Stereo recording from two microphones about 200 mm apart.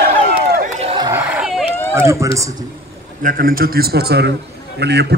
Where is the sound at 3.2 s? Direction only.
45° right (ahead or behind).